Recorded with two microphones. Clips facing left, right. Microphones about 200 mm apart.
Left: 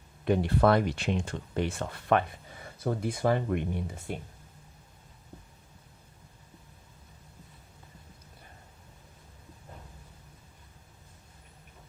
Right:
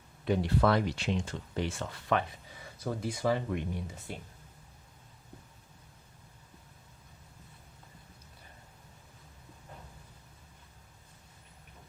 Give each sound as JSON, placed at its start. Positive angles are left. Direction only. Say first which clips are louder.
{"t": 0.3, "sound": "speech", "louder": "left 3 dB", "side_deg": 55}